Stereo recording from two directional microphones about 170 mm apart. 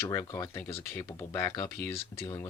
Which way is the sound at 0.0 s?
15° left (ahead or behind).